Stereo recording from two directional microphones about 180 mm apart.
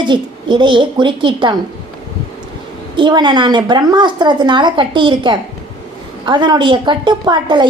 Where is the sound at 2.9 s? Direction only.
25° right (ahead or behind).